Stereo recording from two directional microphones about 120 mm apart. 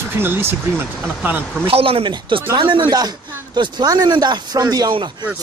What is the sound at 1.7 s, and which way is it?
Speech, 55° right (ahead or behind).